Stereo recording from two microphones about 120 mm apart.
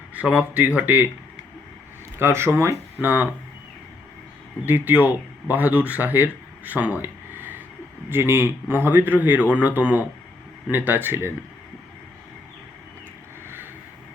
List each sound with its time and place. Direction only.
0.1 s a man's voice: 10° right (ahead or behind)
2.1 s speech: 20° right (ahead or behind)
4.6 s a man's voice: 15° right (ahead or behind)